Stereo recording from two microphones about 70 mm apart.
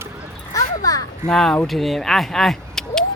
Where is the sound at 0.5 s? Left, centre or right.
Left.